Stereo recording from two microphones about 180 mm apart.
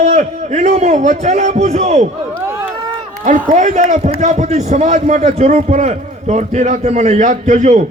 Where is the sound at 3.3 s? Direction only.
45° right (ahead or behind).